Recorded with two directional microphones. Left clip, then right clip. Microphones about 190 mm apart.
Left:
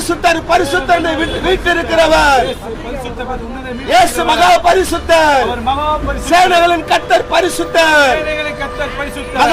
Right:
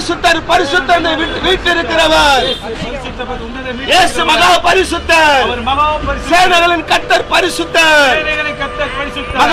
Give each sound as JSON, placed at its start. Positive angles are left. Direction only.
{"t": 0.2, "sound": "a man's voice", "side_deg": 10}
{"t": 3.8, "sound": "a man's voice", "side_deg": 15}